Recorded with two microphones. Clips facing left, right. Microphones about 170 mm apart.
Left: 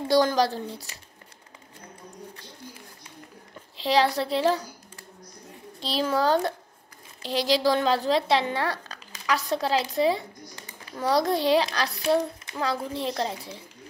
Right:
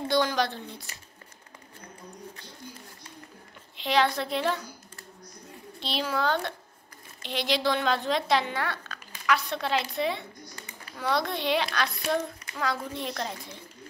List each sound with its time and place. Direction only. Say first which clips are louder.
0.1 s speech: left 5 dB; 40° left (ahead or behind)
3.7 s speech: left 3 dB; 35° left (ahead or behind)
5.8 s a child's voice: left 4 dB; 40° left (ahead or behind)